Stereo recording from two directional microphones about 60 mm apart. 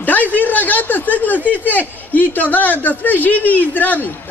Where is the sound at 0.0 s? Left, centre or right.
Left.